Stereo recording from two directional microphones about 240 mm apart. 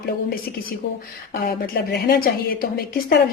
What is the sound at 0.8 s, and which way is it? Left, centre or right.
A woman's voice, left.